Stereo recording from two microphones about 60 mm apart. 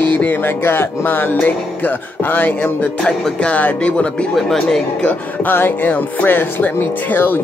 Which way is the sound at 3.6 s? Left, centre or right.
Left.